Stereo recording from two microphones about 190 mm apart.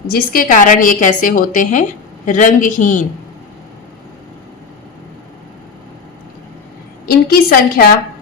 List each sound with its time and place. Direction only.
0.1 s a woman's voice: 45° left (ahead or behind)
7.0 s a woman's voice: 50° left (ahead or behind)